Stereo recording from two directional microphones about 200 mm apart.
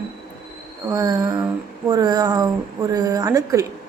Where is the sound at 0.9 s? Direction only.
20° right (ahead or behind).